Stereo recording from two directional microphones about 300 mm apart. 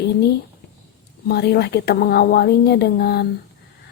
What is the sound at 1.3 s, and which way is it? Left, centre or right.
Speech, left.